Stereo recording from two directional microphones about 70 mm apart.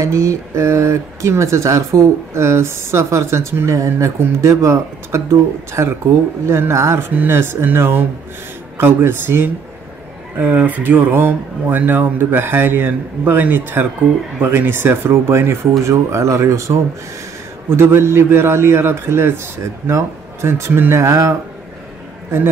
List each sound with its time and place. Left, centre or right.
0.0 s a man's voice: right
20.4 s a man's voice: right